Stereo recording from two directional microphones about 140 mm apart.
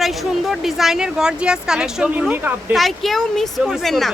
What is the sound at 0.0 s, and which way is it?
A woman's voice, centre (ahead or behind).